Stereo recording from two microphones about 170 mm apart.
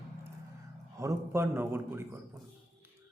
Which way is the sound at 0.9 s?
15° right (ahead or behind).